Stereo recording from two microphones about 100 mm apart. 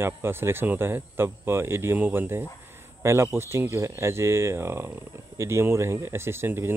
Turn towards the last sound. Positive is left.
turn(degrees=-25)  # may be behind; listen again after turning